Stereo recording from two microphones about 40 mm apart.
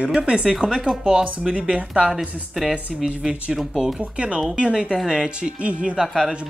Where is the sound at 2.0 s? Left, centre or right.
Centre.